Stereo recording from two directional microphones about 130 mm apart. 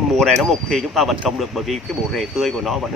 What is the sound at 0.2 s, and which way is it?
Speech, 5° left (ahead or behind).